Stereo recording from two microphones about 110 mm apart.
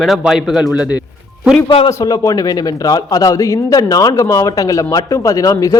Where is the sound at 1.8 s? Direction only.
30° left (ahead or behind).